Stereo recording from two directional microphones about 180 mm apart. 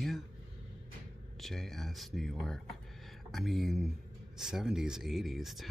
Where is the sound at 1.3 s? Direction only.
Centre (ahead or behind).